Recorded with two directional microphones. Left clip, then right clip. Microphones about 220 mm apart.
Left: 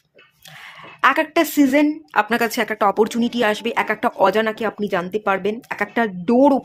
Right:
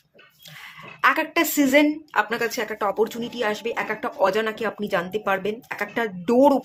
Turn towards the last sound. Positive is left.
turn(degrees=15)  # may be behind; listen again after turning